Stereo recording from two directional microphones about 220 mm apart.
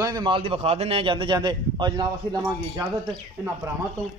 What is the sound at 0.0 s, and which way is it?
A man's voice, 20° right (ahead or behind).